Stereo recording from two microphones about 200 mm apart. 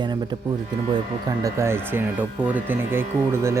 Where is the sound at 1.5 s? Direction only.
15° right (ahead or behind).